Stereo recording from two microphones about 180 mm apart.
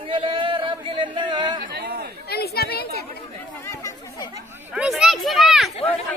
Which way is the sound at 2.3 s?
60° left (ahead or behind).